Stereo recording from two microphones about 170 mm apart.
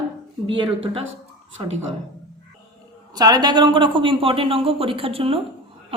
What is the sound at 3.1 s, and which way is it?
A woman's voice, 25° right (ahead or behind).